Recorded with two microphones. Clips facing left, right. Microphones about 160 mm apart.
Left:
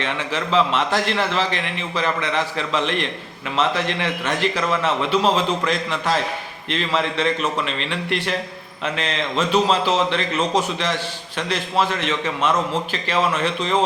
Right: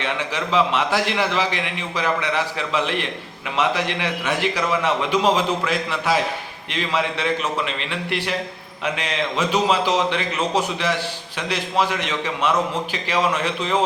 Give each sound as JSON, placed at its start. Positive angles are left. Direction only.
{"t": 0.0, "sound": "a man's voice", "side_deg": -10}